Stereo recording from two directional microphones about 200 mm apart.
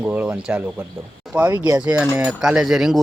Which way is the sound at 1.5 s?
20° right (ahead or behind).